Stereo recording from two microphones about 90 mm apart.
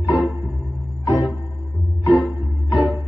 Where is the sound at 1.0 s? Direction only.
45° left (ahead or behind).